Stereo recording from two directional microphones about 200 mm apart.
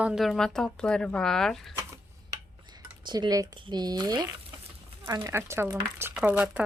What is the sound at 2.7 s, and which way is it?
Speech, 20° right (ahead or behind).